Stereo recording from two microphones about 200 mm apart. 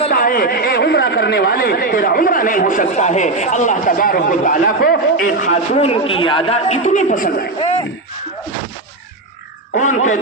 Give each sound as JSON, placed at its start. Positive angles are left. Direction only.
{"t": 0.1, "sound": "speech", "side_deg": 45}
{"t": 9.7, "sound": "speech", "side_deg": 40}